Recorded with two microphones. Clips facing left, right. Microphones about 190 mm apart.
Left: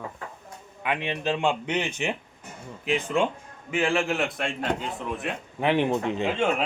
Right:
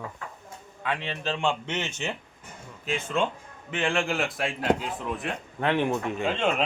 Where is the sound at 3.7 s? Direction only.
5° left (ahead or behind).